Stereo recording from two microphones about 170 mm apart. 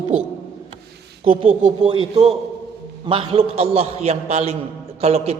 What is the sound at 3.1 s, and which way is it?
A man's voice, 30° right (ahead or behind).